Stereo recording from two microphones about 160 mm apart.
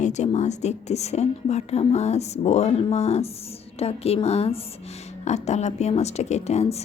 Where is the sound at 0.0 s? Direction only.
45° left (ahead or behind).